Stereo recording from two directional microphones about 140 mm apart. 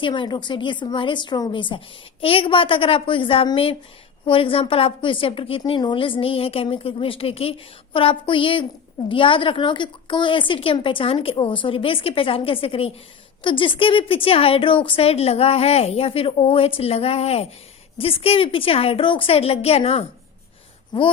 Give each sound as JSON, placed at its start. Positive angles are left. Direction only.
{"t": 0.0, "sound": "a woman's voice", "side_deg": 35}